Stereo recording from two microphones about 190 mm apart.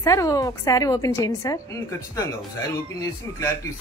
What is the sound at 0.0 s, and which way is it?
A woman's voice, 15° left (ahead or behind).